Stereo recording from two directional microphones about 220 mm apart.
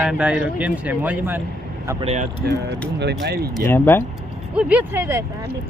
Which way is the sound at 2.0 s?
30° right (ahead or behind).